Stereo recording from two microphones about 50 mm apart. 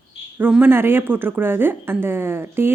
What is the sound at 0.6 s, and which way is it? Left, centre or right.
Speech, right.